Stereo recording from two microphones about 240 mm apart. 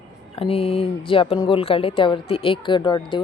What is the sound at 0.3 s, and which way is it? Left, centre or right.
Speech, left.